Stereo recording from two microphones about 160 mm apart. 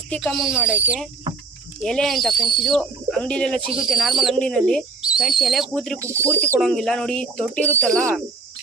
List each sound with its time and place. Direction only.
0.1 s speech: centre (ahead or behind)
1.8 s speech: 5° left (ahead or behind)
6.0 s speech: 15° right (ahead or behind)
6.6 s speech: 5° left (ahead or behind)